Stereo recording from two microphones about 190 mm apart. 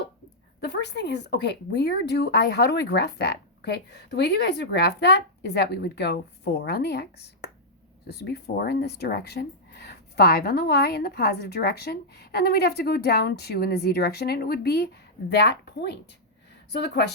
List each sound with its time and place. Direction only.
0.6 s speech: 65° left (ahead or behind)